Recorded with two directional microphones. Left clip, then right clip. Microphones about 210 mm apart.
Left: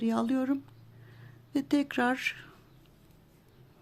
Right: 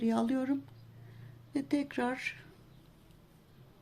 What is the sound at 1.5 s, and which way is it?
Speech, 25° left (ahead or behind).